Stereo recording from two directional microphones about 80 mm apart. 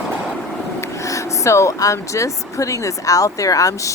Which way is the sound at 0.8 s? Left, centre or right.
Left.